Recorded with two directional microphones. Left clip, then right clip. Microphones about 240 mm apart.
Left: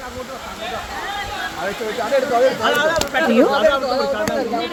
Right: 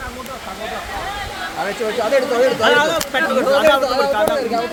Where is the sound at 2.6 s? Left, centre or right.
Right.